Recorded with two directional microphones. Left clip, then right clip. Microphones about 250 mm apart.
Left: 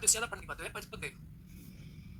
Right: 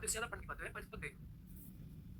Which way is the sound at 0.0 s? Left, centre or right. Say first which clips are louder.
Left 9 dB; left.